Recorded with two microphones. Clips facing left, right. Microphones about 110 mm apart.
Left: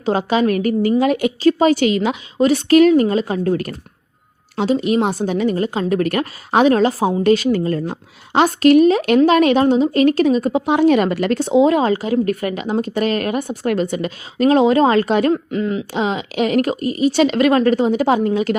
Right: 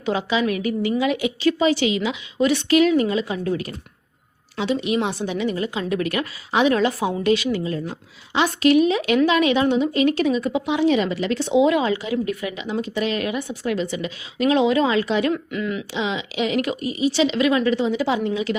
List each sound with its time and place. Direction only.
0.0 s speech: 45° left (ahead or behind)
15.3 s speech: 35° left (ahead or behind)